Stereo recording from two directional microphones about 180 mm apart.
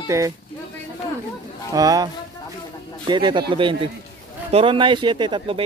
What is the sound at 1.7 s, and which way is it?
Speech, 20° right (ahead or behind).